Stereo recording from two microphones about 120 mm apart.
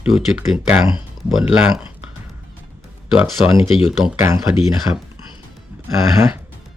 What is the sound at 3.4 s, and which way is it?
Speech, 50° left (ahead or behind).